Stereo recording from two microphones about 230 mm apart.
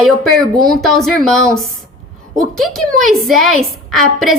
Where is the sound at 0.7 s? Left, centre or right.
Centre.